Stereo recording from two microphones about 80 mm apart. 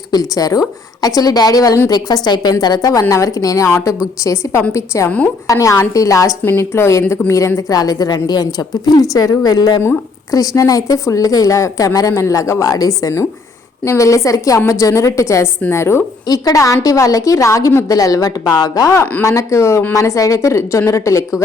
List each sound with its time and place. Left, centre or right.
0.1 s a woman's voice: left
3.1 s a woman's voice: left
5.0 s a woman's voice: centre
5.5 s a woman's voice: left
6.4 s a woman's voice: left
16.2 s a woman's voice: left
17.8 s a woman's voice: left
19.2 s a woman's voice: left